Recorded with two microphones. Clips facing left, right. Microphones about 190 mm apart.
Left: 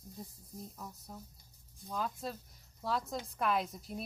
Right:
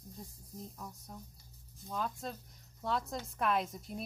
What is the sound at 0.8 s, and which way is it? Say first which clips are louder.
A woman's voice: even; centre (ahead or behind).